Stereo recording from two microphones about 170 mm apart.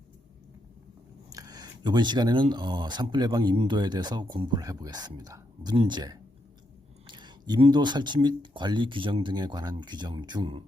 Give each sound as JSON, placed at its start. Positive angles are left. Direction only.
{"t": 1.3, "sound": "speech", "side_deg": -20}